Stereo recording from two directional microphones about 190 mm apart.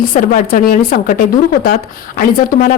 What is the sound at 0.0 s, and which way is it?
Speech, 45° left (ahead or behind).